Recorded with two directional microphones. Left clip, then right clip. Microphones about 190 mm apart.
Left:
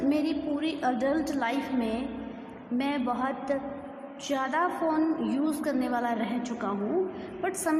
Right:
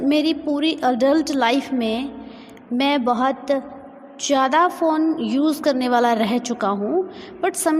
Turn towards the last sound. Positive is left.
turn(degrees=-35)  # may be behind; listen again after turning